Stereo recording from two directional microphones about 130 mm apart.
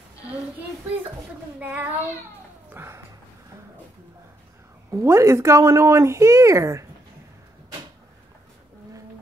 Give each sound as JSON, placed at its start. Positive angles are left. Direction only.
{"t": 1.6, "sound": "child singing", "side_deg": -15}
{"t": 2.7, "sound": "speech", "side_deg": -20}
{"t": 4.9, "sound": "speech", "side_deg": -20}